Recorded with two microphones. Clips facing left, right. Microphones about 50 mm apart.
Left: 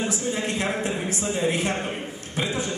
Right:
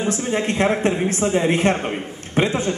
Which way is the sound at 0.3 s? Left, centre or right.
Right.